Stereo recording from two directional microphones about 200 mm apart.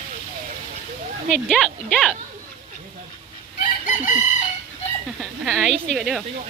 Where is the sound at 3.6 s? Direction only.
40° left (ahead or behind).